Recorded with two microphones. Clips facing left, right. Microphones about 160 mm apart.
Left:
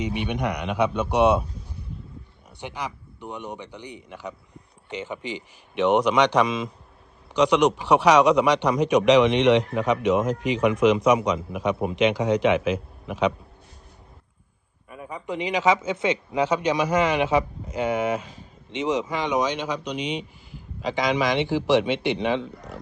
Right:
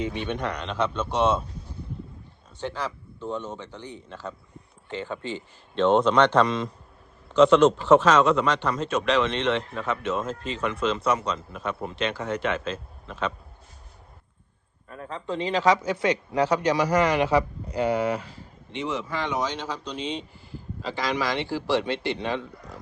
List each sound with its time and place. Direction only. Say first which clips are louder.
0.0 s speech: left 2 dB; 15° left (ahead or behind)
2.6 s speech: right 2 dB; 15° left (ahead or behind)
14.8 s speech: even; 10° left (ahead or behind)